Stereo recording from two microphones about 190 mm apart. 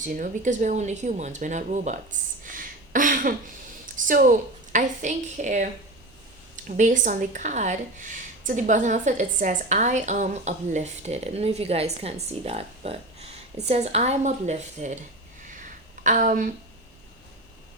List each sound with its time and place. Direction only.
0.0 s a woman's voice: 40° right (ahead or behind)
16.0 s speech: 45° right (ahead or behind)